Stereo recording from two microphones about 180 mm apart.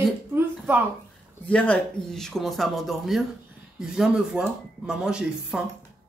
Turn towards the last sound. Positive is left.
turn(degrees=-5)  # may be behind; listen again after turning